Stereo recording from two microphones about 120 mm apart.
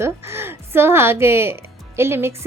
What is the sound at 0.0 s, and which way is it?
A woman's voice, 20° right (ahead or behind).